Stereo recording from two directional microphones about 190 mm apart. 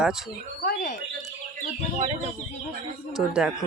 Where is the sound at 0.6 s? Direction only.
40° left (ahead or behind).